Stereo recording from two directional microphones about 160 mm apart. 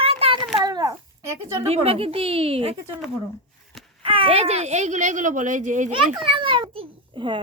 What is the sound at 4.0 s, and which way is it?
Speech, 35° right (ahead or behind).